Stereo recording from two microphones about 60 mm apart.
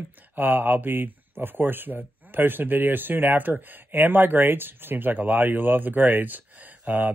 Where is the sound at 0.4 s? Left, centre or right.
Right.